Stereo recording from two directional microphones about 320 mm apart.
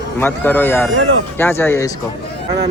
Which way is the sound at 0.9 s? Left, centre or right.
Right.